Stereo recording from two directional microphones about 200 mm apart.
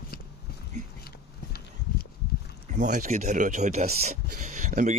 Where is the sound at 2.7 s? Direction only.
40° right (ahead or behind).